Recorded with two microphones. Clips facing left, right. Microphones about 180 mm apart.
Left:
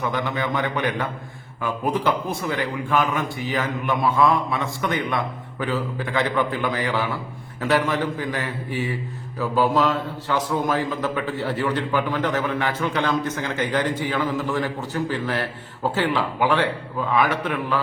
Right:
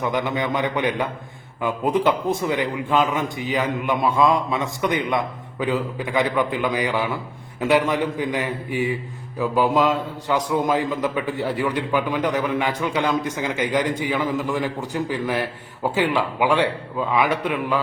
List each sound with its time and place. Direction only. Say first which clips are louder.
0.0 s a man's voice: right 2 dB; 20° right (ahead or behind)